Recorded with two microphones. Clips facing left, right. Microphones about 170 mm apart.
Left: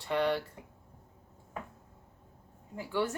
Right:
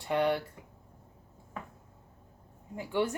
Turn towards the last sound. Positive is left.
turn(degrees=-20)  # may be behind; listen again after turning